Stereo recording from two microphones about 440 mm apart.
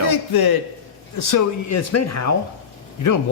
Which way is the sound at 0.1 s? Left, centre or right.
Left.